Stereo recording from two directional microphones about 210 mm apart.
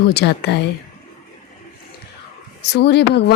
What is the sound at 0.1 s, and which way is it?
Speech, 50° left (ahead or behind).